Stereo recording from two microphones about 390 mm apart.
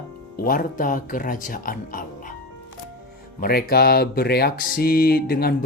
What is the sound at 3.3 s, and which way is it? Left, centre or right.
Speech, left.